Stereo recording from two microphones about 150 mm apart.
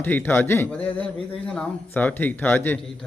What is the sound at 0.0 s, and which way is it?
Speech, 15° left (ahead or behind).